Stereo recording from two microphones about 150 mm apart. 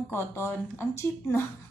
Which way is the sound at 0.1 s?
15° left (ahead or behind).